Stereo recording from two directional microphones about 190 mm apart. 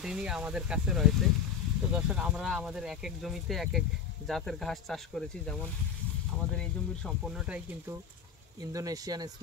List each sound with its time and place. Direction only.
0.0 s speech: 5° right (ahead or behind)
8.5 s speech: 20° right (ahead or behind)